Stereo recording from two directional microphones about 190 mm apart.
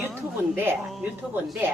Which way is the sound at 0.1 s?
10° right (ahead or behind).